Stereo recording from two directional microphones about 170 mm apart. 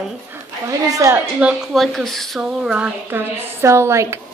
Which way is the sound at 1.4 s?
Centre (ahead or behind).